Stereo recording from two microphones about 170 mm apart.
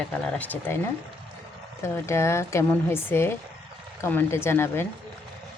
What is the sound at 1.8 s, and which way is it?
Speech, 15° left (ahead or behind).